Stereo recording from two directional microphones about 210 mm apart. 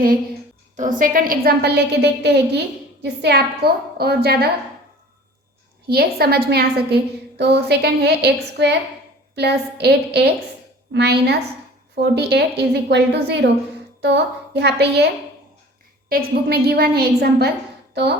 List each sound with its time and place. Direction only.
0.8 s a woman's voice: 40° right (ahead or behind)
5.8 s a woman's voice: 50° right (ahead or behind)